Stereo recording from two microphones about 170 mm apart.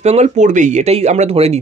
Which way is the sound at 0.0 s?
40° right (ahead or behind).